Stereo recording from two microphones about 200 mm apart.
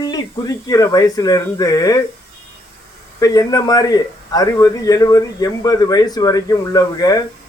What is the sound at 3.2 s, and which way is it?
Speech, 20° left (ahead or behind).